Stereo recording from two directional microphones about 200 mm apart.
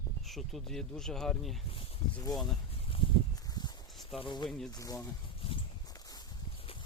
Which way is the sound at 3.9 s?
Centre (ahead or behind).